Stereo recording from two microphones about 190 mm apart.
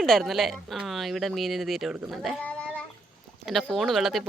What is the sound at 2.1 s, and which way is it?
Cat, centre (ahead or behind).